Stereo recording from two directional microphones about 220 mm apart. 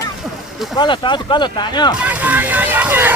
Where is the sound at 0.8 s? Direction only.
20° left (ahead or behind).